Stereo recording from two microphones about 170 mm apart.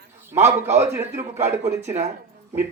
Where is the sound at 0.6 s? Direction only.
15° right (ahead or behind).